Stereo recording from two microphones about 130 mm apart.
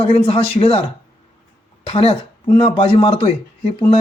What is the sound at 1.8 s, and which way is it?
Speech, 50° left (ahead or behind).